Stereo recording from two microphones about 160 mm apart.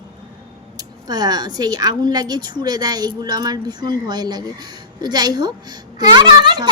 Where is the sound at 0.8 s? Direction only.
25° right (ahead or behind).